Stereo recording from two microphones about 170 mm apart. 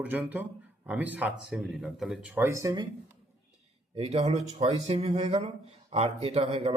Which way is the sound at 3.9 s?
35° right (ahead or behind).